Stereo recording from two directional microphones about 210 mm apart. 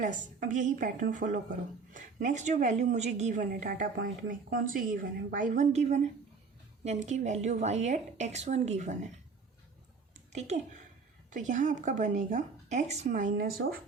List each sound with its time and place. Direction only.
0.0 s a woman's voice: 35° right (ahead or behind)
10.3 s a woman's voice: 35° right (ahead or behind)